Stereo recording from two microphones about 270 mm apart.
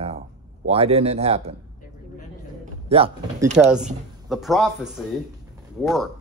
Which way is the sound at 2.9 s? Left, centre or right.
Right.